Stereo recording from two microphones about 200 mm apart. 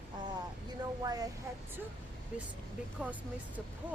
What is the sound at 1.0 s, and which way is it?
Speech, 20° right (ahead or behind).